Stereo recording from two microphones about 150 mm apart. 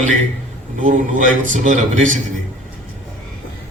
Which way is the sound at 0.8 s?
60° right (ahead or behind).